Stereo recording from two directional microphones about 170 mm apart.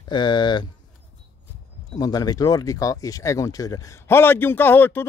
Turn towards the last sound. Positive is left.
turn(degrees=10)  # may be behind; listen again after turning